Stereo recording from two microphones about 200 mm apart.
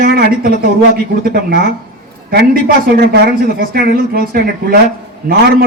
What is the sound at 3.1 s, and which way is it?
A man's voice, 50° right (ahead or behind).